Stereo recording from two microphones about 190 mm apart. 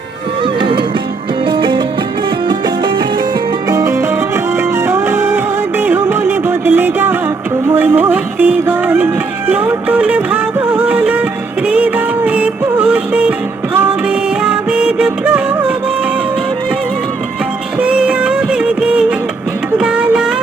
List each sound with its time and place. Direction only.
0.6 s music: 25° right (ahead or behind)
3.7 s music: 15° right (ahead or behind)
14.4 s music: 5° right (ahead or behind)
17.7 s music: 5° right (ahead or behind)